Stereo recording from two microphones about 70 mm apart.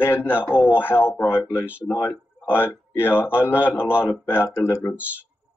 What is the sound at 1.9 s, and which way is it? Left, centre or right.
Speech, left.